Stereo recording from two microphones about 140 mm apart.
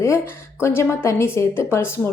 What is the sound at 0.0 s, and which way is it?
A woman's voice, 20° left (ahead or behind).